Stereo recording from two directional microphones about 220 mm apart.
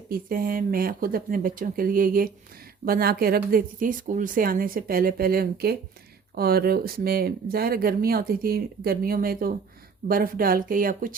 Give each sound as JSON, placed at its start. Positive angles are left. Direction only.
{"t": 0.1, "sound": "speech", "side_deg": -40}